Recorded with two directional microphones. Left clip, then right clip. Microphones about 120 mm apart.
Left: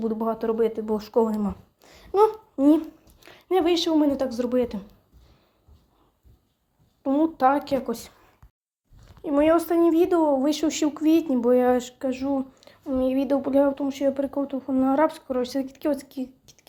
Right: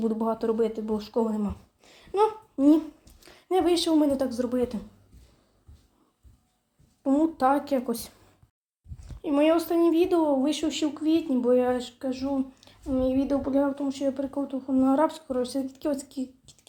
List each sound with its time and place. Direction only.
0.0 s speech: 5° left (ahead or behind); by 0.9 s 25° left (ahead or behind)
0.9 s speech: 40° left (ahead or behind)
1.4 s a sound: 25° left (ahead or behind)
2.0 s speech: 35° left (ahead or behind); by 4.4 s 15° left (ahead or behind)
4.4 s speech: 30° left (ahead or behind)
7.0 s speech: 15° left (ahead or behind)
9.2 s speech: 15° left (ahead or behind)
9.6 s speech: 30° left (ahead or behind)
10.4 s a woman's voice: 50° left (ahead or behind); by 11.3 s 75° left (ahead or behind)
11.3 s speech: 55° left (ahead or behind)
12.4 s a sound: 35° left (ahead or behind)
12.8 s speech: 30° left (ahead or behind)